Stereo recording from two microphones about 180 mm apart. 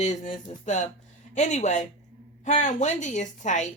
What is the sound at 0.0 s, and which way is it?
A woman's voice, 40° left (ahead or behind).